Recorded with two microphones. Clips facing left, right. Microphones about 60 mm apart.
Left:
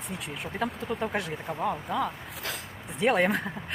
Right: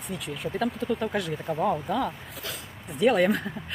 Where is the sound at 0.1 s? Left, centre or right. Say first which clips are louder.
Right 5 dB; left.